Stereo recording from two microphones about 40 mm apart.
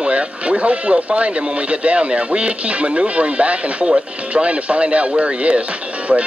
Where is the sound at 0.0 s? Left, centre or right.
Right.